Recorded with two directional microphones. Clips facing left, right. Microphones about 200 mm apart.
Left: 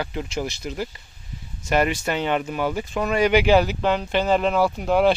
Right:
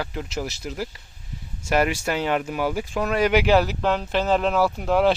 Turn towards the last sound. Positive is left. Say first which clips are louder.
# left 1 dB
turn(degrees=0)  # may be behind; listen again after turning